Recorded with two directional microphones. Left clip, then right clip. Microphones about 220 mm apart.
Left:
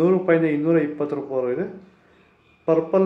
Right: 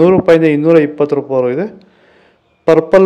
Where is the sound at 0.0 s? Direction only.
45° right (ahead or behind).